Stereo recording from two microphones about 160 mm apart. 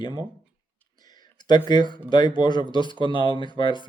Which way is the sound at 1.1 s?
25° left (ahead or behind).